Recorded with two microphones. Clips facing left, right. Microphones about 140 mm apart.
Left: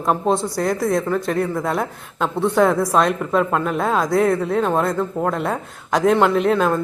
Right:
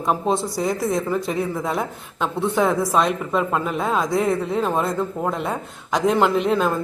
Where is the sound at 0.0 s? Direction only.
Centre (ahead or behind).